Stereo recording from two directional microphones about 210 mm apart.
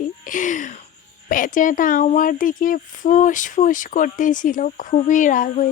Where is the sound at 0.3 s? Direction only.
40° left (ahead or behind).